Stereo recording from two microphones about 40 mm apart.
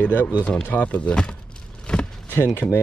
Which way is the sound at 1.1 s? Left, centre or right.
Centre.